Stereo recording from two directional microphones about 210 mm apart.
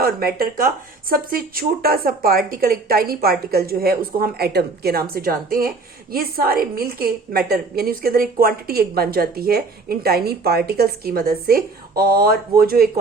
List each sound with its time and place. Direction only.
0.0 s a woman's voice: 45° right (ahead or behind)